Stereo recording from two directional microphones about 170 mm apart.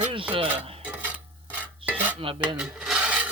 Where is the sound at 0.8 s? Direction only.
10° right (ahead or behind).